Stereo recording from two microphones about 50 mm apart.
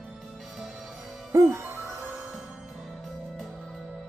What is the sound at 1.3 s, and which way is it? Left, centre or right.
Music, right.